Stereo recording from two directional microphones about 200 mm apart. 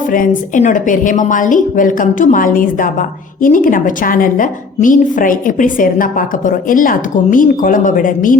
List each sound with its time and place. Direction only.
0.1 s a woman's voice: 40° left (ahead or behind)